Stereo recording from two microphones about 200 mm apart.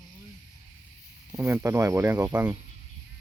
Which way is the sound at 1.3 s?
10° right (ahead or behind).